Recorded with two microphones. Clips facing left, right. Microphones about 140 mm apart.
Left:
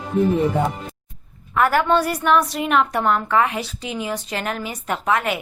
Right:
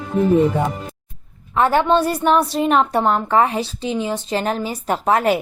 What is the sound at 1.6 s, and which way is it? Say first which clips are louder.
A woman's voice: right 2 dB; 25° right (ahead or behind).